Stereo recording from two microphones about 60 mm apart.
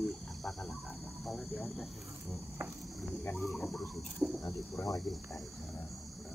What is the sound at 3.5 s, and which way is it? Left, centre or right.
Speech, centre.